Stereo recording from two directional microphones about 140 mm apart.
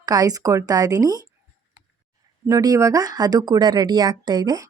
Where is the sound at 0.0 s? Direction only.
25° right (ahead or behind).